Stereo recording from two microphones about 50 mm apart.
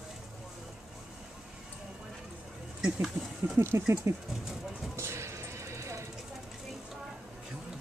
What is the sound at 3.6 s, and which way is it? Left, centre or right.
Speech, right.